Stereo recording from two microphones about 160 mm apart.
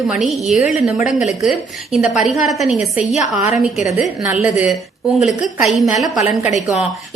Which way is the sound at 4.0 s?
5° right (ahead or behind).